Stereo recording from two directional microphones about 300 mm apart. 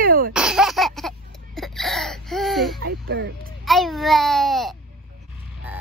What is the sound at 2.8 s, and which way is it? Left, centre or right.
Speech, right.